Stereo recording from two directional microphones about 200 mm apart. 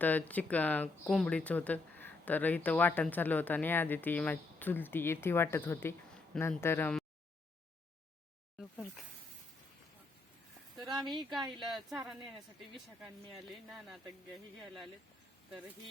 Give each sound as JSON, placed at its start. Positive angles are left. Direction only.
{"t": 0.0, "sound": "speech", "side_deg": 10}
{"t": 8.5, "sound": "snake", "side_deg": 0}
{"t": 10.8, "sound": "a sound", "side_deg": -20}
{"t": 11.2, "sound": "speech", "side_deg": 0}
{"t": 13.0, "sound": "speech", "side_deg": 0}